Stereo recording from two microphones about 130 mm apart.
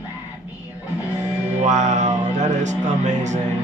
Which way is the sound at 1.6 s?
65° right (ahead or behind).